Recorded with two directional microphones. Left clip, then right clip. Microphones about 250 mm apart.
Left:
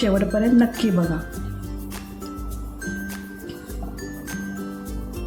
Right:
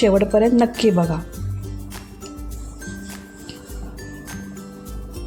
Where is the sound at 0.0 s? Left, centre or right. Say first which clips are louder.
Right 6 dB; right.